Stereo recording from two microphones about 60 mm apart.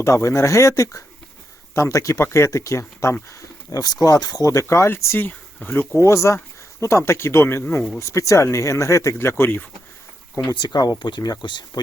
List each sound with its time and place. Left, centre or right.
0.0 s speech: left
3.7 s speech: left
5.1 s speech: left
6.0 s speech: left
7.9 s speech: left
10.4 s speech: left
11.2 s speech: left